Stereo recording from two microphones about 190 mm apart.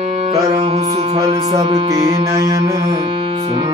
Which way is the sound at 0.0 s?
30° right (ahead or behind).